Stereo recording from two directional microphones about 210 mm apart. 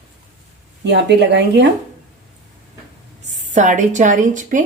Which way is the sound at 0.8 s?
55° right (ahead or behind).